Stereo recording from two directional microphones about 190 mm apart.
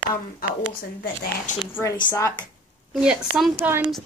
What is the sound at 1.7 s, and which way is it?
Speech, 15° left (ahead or behind).